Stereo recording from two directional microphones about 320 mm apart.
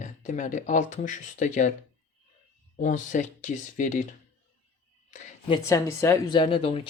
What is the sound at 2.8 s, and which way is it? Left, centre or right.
Speech, left.